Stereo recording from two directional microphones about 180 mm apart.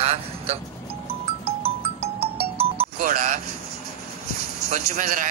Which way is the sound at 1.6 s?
30° right (ahead or behind).